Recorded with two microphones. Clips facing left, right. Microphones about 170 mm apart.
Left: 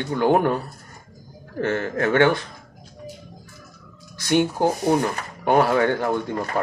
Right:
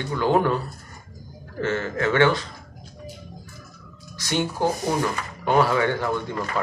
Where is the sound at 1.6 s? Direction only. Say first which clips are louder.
Left 2 dB; 55° left (ahead or behind).